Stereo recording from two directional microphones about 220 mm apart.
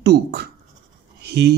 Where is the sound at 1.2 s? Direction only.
50° right (ahead or behind).